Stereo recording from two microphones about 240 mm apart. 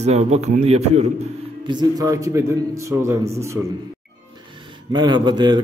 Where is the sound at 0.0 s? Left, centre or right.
Right; by 3.6 s centre.